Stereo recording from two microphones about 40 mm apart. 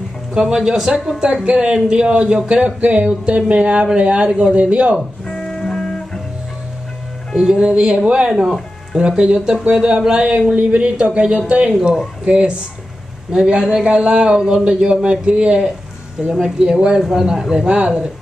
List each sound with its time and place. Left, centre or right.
0.3 s speech: centre; by 5.0 s right
5.2 s music: centre
7.3 s speech: centre
17.6 s speech: right